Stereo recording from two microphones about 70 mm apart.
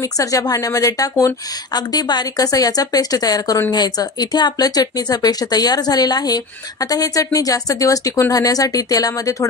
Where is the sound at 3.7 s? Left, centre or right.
Left.